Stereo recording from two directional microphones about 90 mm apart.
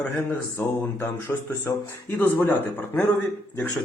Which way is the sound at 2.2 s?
20° left (ahead or behind).